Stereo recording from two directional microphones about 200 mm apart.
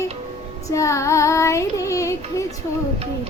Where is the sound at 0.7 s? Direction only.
15° left (ahead or behind).